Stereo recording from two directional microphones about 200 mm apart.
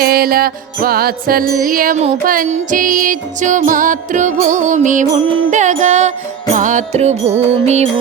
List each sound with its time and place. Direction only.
0.0 s music: 50° right (ahead or behind); by 7.9 s 35° right (ahead or behind)